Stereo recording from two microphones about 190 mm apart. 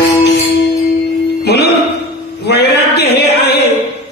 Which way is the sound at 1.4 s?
55° left (ahead or behind).